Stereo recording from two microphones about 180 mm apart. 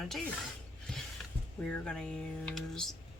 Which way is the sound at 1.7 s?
5° left (ahead or behind).